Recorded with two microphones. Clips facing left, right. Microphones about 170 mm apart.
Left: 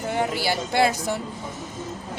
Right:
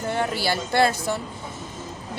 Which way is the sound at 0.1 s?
15° left (ahead or behind).